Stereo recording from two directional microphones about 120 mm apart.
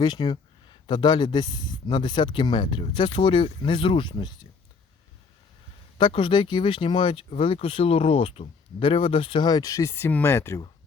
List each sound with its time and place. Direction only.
0.0 s speech: 40° left (ahead or behind)
6.0 s speech: 45° left (ahead or behind); by 10.6 s 20° left (ahead or behind)